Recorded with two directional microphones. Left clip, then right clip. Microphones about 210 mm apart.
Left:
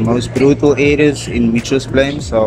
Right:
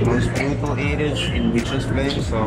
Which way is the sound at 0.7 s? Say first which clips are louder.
Left 13 dB; 50° left (ahead or behind).